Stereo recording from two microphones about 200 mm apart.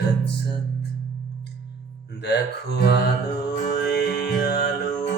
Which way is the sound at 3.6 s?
55° left (ahead or behind).